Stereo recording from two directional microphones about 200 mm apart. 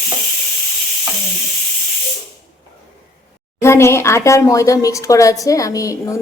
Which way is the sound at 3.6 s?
15° left (ahead or behind).